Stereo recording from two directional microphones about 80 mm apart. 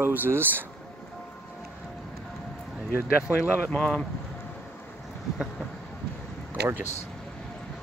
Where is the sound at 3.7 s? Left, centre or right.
Centre.